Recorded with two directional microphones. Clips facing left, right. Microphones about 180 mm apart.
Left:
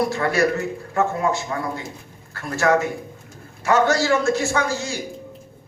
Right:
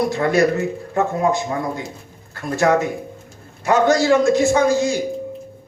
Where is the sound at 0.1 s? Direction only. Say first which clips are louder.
Right 4 dB; 20° right (ahead or behind).